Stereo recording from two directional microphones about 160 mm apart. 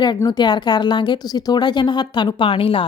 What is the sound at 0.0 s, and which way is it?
Speech, 25° left (ahead or behind).